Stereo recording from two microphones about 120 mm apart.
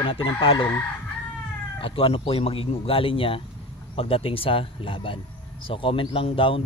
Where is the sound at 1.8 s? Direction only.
50° left (ahead or behind).